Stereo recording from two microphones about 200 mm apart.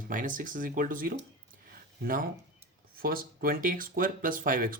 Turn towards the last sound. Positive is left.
turn(degrees=-45)  # may be behind; listen again after turning